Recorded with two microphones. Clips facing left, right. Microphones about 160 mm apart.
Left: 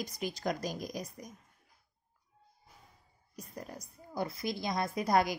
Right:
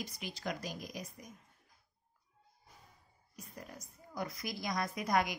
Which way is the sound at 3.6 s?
35° left (ahead or behind).